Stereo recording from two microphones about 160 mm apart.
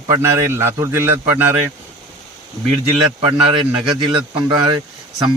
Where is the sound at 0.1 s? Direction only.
20° right (ahead or behind).